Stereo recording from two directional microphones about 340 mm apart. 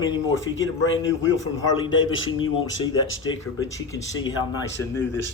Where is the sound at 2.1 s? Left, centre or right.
Left.